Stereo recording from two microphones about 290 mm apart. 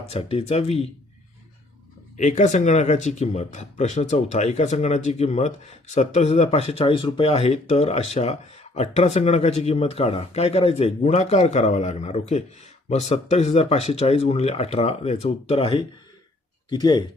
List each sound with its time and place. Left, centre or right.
0.0 s speech: centre
2.1 s speech: left